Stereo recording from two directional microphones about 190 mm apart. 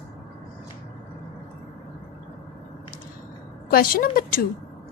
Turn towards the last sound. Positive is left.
turn(degrees=50)  # may be behind; listen again after turning